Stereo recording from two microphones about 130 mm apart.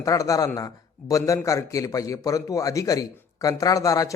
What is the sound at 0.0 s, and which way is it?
A man's voice, 25° left (ahead or behind).